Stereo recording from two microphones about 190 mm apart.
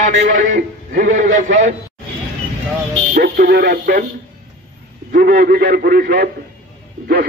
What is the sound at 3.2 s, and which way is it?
Speech, 50° right (ahead or behind).